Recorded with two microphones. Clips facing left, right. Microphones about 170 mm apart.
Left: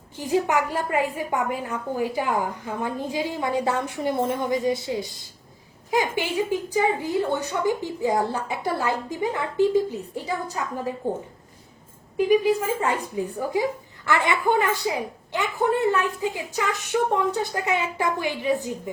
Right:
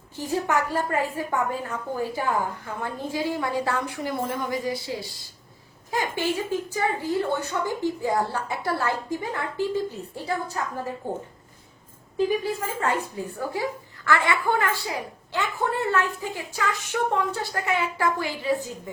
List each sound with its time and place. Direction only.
0.2 s speech: 15° left (ahead or behind)
12.1 s speech: 15° left (ahead or behind)